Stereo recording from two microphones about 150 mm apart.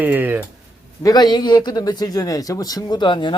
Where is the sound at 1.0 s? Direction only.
25° left (ahead or behind).